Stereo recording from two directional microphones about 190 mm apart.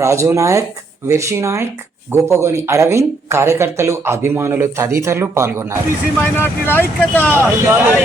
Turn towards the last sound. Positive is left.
turn(degrees=-10)  # may be behind; listen again after turning